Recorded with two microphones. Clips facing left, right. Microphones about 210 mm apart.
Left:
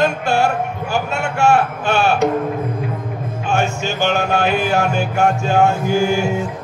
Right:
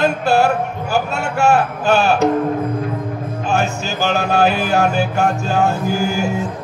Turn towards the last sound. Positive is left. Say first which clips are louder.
# left 2 dB
turn(degrees=-40)  # may be behind; listen again after turning